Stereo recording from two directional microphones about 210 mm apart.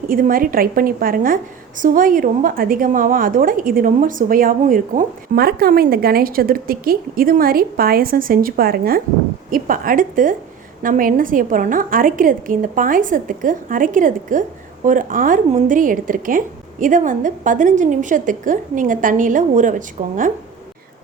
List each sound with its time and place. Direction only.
0.1 s a woman's voice: 40° right (ahead or behind)